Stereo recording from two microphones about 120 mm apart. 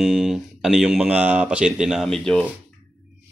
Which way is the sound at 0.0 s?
Centre (ahead or behind).